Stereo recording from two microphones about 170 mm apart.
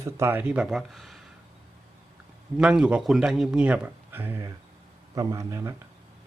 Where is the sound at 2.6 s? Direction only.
5° right (ahead or behind).